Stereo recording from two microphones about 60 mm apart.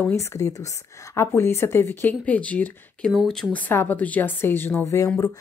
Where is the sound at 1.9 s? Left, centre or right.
Left.